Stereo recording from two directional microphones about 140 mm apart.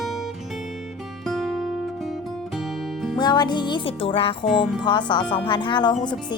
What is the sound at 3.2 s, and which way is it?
Speech, 30° left (ahead or behind).